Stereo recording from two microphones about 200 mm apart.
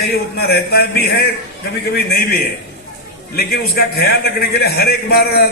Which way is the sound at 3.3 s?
50° left (ahead or behind).